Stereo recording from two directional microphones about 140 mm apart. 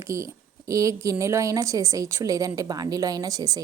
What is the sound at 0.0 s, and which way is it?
Speech, 20° right (ahead or behind).